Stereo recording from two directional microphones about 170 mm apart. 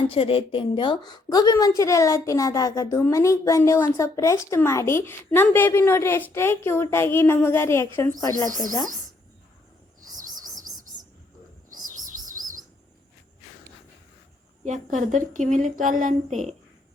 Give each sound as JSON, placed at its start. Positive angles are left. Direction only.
{"t": 0.1, "sound": "a woman's voice", "side_deg": 35}
{"t": 10.0, "sound": "bird", "side_deg": -50}
{"t": 11.7, "sound": "bird", "side_deg": -50}
{"t": 14.6, "sound": "a woman's voice", "side_deg": -45}